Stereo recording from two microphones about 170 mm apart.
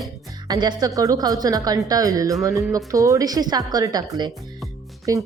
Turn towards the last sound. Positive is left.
turn(degrees=-20)  # may be behind; listen again after turning